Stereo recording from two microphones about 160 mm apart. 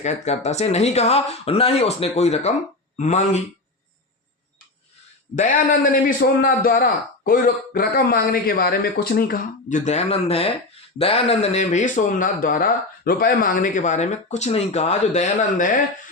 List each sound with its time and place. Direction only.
0.0 s speech: 45° left (ahead or behind)
5.4 s a man's voice: 55° left (ahead or behind)